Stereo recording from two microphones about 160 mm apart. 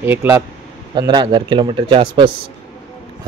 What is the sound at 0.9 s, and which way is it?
Speech, 30° right (ahead or behind).